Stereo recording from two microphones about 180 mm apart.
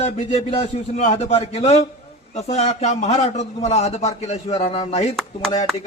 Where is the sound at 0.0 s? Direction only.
35° left (ahead or behind).